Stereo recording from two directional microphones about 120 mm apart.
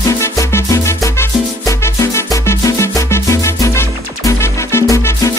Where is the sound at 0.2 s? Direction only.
25° left (ahead or behind).